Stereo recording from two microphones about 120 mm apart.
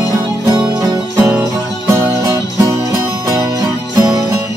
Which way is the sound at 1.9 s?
25° right (ahead or behind).